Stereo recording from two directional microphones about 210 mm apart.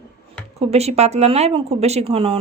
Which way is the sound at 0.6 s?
30° right (ahead or behind).